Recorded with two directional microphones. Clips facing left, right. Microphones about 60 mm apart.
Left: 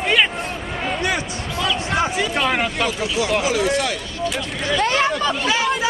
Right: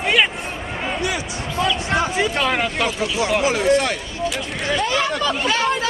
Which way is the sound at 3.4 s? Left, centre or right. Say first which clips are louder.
Right 2 dB; right.